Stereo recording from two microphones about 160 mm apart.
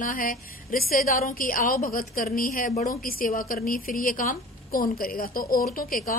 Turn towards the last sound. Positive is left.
turn(degrees=60)  # may be behind; listen again after turning